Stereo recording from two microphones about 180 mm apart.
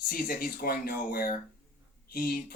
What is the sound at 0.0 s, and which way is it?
Speech, 55° left (ahead or behind).